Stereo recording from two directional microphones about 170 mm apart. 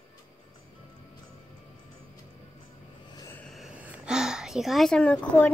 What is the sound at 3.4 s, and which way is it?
A woman's voice, centre (ahead or behind).